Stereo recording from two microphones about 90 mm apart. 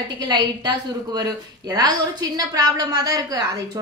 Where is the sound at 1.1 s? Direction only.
50° right (ahead or behind).